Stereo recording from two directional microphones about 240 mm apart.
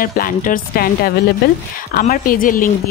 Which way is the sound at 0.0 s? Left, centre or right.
Left.